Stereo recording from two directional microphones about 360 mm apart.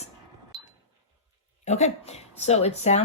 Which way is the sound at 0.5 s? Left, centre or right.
Centre.